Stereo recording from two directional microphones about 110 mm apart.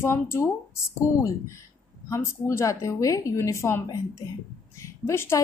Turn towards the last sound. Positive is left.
turn(degrees=25)  # may be behind; listen again after turning